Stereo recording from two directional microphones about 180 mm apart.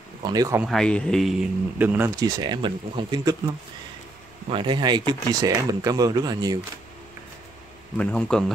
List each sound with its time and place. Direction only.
0.2 s speech: 20° right (ahead or behind)
0.6 s speech: centre (ahead or behind)
1.8 s speech: 10° right (ahead or behind)
4.5 s speech: 25° right (ahead or behind)
8.0 s speech: 5° left (ahead or behind)